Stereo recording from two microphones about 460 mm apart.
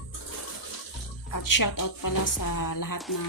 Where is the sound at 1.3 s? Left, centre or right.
Left.